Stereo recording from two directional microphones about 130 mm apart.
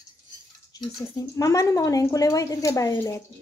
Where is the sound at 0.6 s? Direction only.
30° left (ahead or behind).